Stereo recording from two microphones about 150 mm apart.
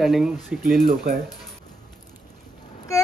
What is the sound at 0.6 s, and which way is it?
Speech, 70° right (ahead or behind).